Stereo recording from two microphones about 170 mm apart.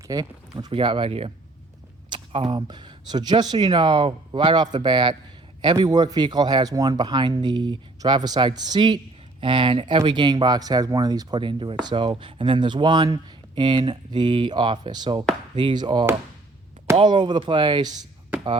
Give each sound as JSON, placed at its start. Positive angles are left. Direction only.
{"t": 0.1, "sound": "speech", "side_deg": -20}